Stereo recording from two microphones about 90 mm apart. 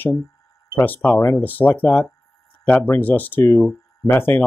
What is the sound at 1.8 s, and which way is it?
Speech, 10° left (ahead or behind).